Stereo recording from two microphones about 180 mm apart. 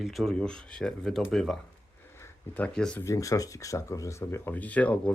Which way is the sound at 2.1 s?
10° left (ahead or behind).